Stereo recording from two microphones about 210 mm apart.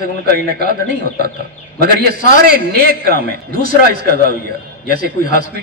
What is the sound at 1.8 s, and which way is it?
A man's voice, 45° right (ahead or behind).